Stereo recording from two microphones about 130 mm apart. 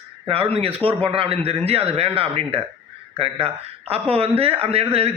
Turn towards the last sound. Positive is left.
turn(degrees=-50)  # may be behind; listen again after turning